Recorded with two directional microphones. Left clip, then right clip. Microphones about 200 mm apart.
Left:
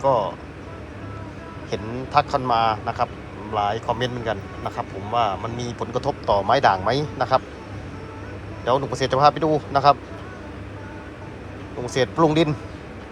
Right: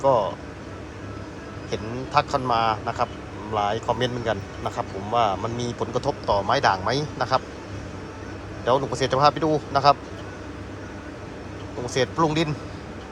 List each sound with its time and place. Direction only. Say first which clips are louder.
0.0 s speech: even; 20° right (ahead or behind)
1.7 s a man's voice: left 2 dB; 15° right (ahead or behind)
8.6 s a man's voice: even; 20° right (ahead or behind)
11.9 s a man's voice: left 4 dB; 10° right (ahead or behind)